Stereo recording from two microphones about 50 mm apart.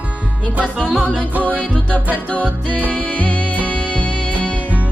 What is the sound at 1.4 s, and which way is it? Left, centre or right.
Music, left.